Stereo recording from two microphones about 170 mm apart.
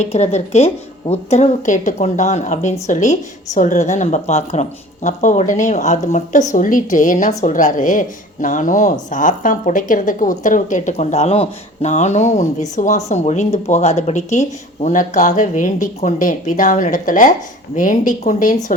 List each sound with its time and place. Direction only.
0.0 s a woman's voice: 40° left (ahead or behind)